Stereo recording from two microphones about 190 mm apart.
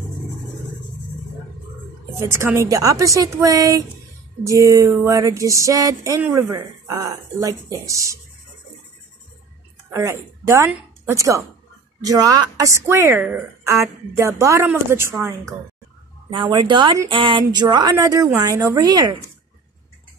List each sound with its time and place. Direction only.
2.1 s a woman's voice: 15° right (ahead or behind)
9.8 s a woman's voice: 15° right (ahead or behind)
16.3 s speech: 25° right (ahead or behind)